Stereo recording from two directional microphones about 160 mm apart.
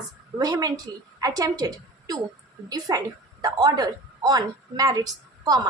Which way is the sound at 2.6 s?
25° right (ahead or behind).